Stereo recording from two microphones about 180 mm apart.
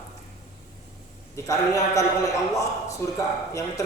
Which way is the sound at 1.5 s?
20° left (ahead or behind).